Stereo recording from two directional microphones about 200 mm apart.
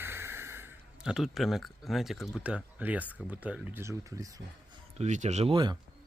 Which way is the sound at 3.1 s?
10° right (ahead or behind).